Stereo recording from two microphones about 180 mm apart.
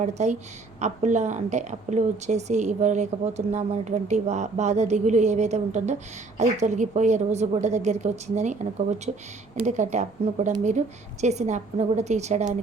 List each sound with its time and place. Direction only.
0.0 s a woman's voice: 40° right (ahead or behind)